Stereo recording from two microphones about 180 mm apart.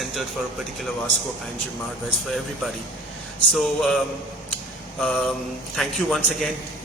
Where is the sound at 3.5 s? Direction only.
Centre (ahead or behind).